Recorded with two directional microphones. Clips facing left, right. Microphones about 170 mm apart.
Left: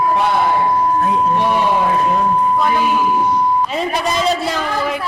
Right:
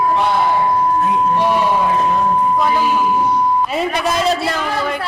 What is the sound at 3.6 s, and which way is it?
Speech, 5° right (ahead or behind).